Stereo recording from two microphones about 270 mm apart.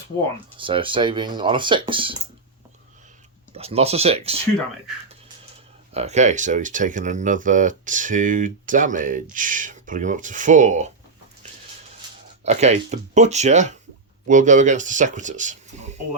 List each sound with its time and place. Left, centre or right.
0.6 s speech: centre
3.5 s speech: right
5.9 s speech: right
12.5 s speech: right